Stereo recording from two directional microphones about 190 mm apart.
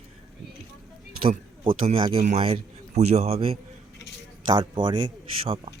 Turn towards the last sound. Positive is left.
turn(degrees=-30)  # may be behind; listen again after turning